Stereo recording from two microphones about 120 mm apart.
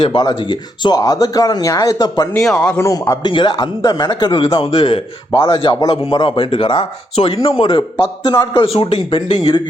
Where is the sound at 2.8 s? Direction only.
25° left (ahead or behind).